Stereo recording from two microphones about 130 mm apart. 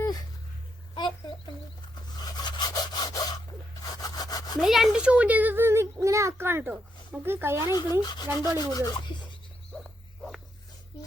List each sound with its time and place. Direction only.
2.4 s rub: 35° left (ahead or behind)
4.0 s sawing: 30° left (ahead or behind)
4.6 s a child's voice: centre (ahead or behind); by 7.7 s 20° right (ahead or behind)
7.7 s speech: 30° left (ahead or behind)